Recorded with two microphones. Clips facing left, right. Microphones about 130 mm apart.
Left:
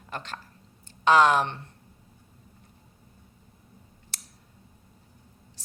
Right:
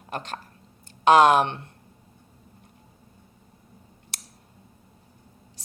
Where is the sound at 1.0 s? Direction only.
60° right (ahead or behind).